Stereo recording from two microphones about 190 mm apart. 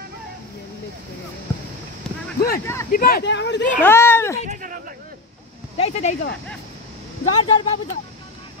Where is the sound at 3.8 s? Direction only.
10° left (ahead or behind).